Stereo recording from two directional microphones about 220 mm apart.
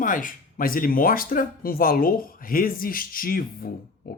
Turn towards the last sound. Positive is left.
turn(degrees=40)  # may be behind; listen again after turning